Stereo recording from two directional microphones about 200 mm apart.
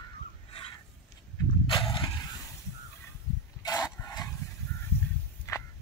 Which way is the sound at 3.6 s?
20° left (ahead or behind).